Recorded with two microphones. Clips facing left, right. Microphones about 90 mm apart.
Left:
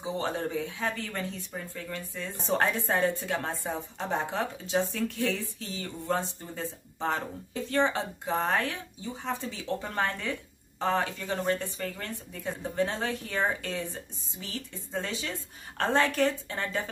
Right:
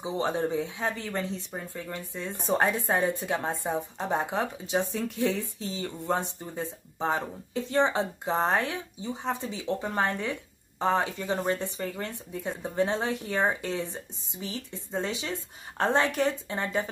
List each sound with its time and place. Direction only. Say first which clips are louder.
0.0 s speech: right 3 dB; 20° right (ahead or behind)